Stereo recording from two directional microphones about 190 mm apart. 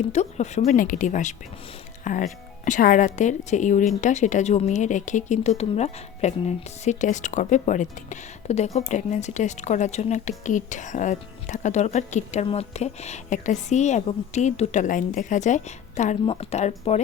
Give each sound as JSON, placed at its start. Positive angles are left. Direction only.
{"t": 0.1, "sound": "a woman's voice", "side_deg": 35}